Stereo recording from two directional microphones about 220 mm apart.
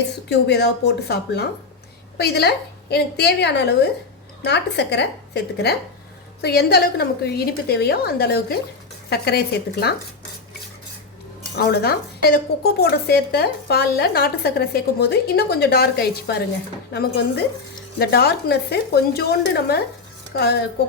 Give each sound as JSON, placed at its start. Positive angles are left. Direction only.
{"t": 0.3, "sound": "speech", "side_deg": 50}
{"t": 11.5, "sound": "speech", "side_deg": 45}